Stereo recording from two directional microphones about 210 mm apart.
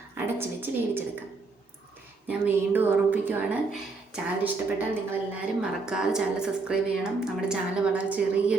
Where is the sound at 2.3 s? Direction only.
10° right (ahead or behind).